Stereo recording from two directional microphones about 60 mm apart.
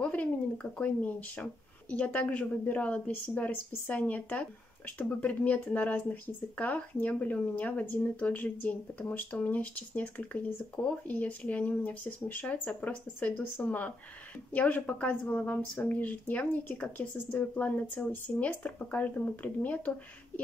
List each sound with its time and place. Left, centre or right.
0.0 s speech: left